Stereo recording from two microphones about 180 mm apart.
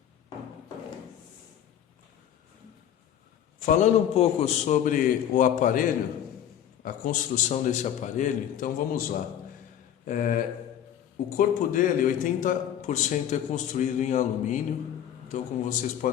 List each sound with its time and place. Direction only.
3.7 s a man's voice: 40° left (ahead or behind)
6.8 s a man's voice: 50° left (ahead or behind)
10.1 s a man's voice: 45° left (ahead or behind)